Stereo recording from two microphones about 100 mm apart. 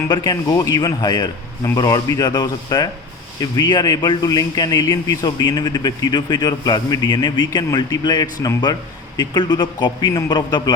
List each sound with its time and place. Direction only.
0.1 s a man's voice: 40° left (ahead or behind)